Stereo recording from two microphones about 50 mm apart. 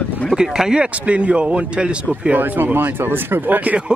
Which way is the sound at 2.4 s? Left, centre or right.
Right.